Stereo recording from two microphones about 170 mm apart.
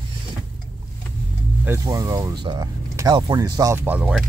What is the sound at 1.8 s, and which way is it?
Speech, 20° right (ahead or behind).